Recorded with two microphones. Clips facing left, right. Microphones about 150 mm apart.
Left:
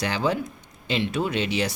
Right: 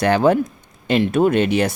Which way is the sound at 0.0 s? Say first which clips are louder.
Right 10 dB; 55° right (ahead or behind).